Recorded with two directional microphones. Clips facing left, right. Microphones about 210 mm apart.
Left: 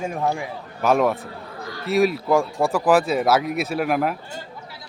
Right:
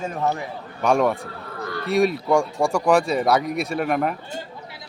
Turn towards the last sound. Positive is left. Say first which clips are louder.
# left 1 dB
turn(degrees=5)  # may be behind; listen again after turning